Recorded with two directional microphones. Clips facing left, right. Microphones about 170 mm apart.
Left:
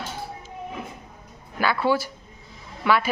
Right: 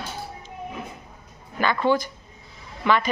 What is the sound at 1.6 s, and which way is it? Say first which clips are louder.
Speech: right 1 dB; 10° left (ahead or behind).